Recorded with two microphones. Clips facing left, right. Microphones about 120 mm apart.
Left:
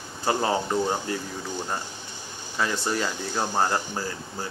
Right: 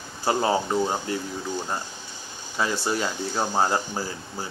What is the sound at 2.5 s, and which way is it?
Speech, 5° right (ahead or behind).